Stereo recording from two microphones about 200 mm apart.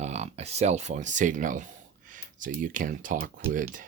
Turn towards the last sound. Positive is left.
turn(degrees=-40)  # may be behind; listen again after turning